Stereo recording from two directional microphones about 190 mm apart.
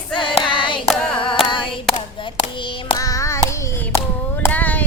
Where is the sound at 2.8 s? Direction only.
20° left (ahead or behind).